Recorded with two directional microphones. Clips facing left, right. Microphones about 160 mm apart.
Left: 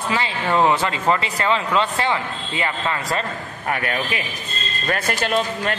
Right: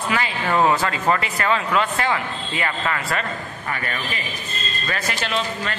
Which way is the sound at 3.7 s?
60° left (ahead or behind).